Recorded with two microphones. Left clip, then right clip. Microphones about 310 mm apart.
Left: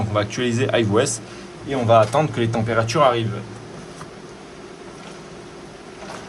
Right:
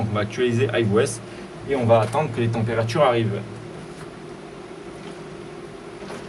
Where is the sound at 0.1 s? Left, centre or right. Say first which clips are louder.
Left 1 dB; centre.